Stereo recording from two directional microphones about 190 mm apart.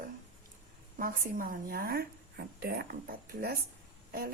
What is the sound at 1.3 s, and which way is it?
Speech, 50° right (ahead or behind).